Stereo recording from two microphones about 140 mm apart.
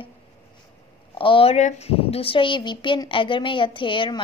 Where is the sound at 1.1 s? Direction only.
40° left (ahead or behind).